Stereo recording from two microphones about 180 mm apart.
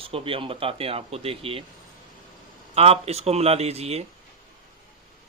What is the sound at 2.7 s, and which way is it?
Speech, 35° right (ahead or behind).